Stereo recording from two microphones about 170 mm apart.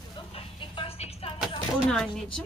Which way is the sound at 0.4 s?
35° left (ahead or behind).